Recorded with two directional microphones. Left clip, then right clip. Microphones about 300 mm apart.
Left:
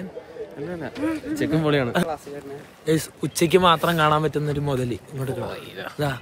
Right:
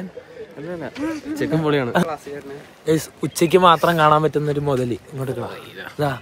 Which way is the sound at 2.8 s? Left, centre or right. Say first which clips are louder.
Right 3 dB; centre.